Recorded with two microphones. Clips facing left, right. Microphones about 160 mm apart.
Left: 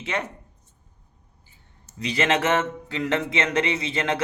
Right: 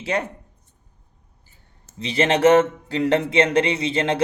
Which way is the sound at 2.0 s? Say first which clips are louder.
Right 4 dB; 30° right (ahead or behind).